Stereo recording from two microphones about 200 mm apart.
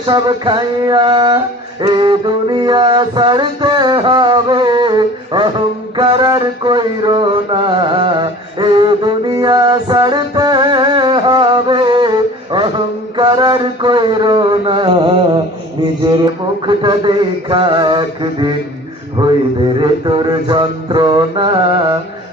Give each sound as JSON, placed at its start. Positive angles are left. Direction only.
{"t": 0.0, "sound": "mantra", "side_deg": -25}
{"t": 16.6, "sound": "mantra", "side_deg": -25}